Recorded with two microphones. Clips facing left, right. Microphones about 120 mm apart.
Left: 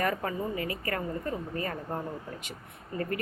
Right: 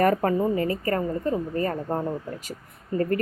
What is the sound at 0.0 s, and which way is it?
A woman's voice, 45° right (ahead or behind).